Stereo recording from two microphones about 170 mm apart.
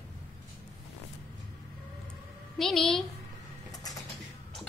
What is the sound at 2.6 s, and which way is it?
Speech, centre (ahead or behind).